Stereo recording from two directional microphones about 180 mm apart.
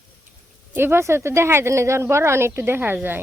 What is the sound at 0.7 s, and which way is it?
Speech, 15° right (ahead or behind).